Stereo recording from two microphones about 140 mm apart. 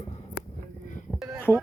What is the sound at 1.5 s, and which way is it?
Speech, 15° left (ahead or behind).